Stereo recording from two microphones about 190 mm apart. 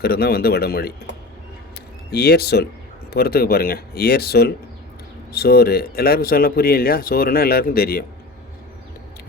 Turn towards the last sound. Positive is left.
turn(degrees=55)  # may be behind; listen again after turning